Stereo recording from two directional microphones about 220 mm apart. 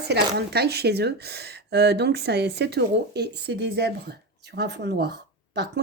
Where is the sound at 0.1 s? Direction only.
45° right (ahead or behind).